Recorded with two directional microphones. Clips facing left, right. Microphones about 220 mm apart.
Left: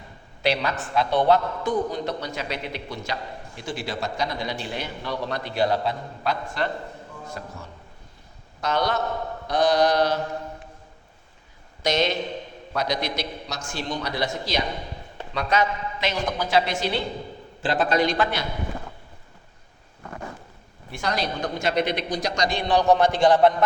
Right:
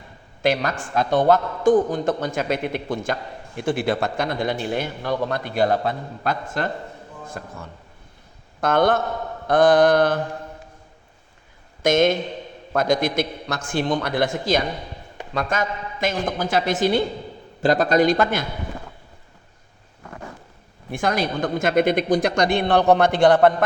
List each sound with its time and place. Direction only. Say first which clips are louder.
0.4 s a man's voice: right 3 dB; 45° right (ahead or behind)
8.6 s a man's voice: right 6 dB; 50° right (ahead or behind)
11.8 s a man's voice: right 6 dB; 50° right (ahead or behind)
20.9 s a man's voice: right 5 dB; 50° right (ahead or behind)